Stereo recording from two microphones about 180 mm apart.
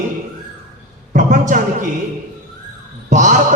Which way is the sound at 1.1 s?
45° right (ahead or behind).